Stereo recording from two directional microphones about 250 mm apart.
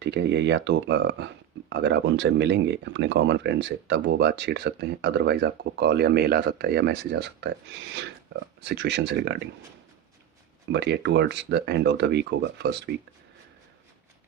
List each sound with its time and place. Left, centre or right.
0.0 s speech: right
10.7 s speech: right